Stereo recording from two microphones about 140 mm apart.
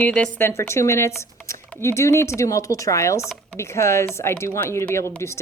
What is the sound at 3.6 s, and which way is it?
Speech, 20° left (ahead or behind).